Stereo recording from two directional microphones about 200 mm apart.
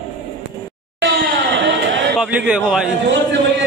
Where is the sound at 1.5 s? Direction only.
75° right (ahead or behind).